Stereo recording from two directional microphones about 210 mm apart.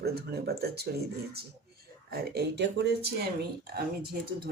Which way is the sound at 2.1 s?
50° right (ahead or behind).